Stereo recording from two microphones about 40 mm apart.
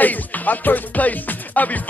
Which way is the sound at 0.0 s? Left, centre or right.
Left.